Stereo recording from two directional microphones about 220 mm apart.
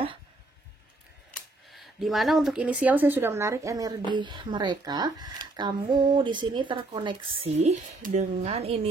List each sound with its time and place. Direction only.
1.7 s speech: centre (ahead or behind); by 8.7 s 25° right (ahead or behind)